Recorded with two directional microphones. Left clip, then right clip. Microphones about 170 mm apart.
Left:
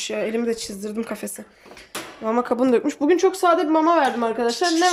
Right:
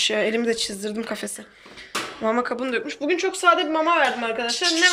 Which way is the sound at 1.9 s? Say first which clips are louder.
Right 1 dB; 10° left (ahead or behind).